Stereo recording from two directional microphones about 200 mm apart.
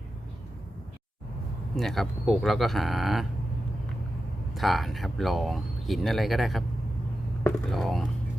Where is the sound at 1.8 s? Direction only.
Centre (ahead or behind).